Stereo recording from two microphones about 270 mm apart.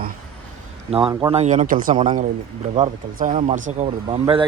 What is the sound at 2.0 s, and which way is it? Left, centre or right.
Speech, centre.